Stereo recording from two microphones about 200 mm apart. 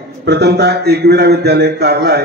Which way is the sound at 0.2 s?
55° right (ahead or behind).